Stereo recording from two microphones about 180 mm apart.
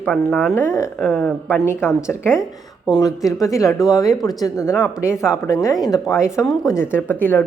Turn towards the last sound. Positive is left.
turn(degrees=10)  # may be behind; listen again after turning